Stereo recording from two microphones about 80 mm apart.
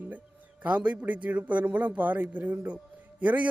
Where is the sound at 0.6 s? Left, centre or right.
Centre.